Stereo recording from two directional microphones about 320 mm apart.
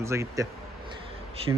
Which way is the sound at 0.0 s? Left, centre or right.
Centre.